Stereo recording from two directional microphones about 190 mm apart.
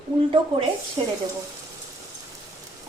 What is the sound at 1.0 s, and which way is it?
Speech, 30° right (ahead or behind).